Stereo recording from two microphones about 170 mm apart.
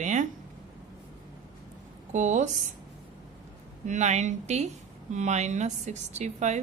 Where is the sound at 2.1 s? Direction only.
45° right (ahead or behind).